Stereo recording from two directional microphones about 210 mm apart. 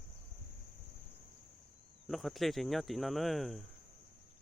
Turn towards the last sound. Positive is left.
turn(degrees=0)  # may be behind; listen again after turning